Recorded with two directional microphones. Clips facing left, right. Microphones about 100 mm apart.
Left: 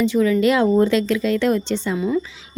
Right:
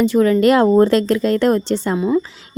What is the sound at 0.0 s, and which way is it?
A woman's voice, 50° right (ahead or behind).